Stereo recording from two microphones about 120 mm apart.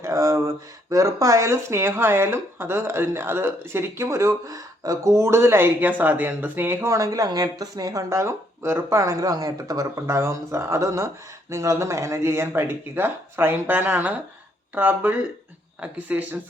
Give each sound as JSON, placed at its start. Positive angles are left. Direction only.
{"t": 0.0, "sound": "speech", "side_deg": -25}